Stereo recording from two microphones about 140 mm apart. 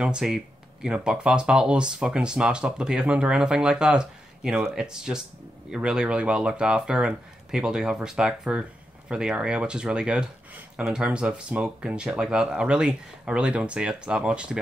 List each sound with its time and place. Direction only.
0.0 s speech: 5° right (ahead or behind)